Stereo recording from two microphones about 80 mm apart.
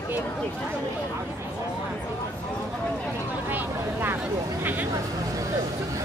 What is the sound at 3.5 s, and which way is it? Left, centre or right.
Vehicle, right.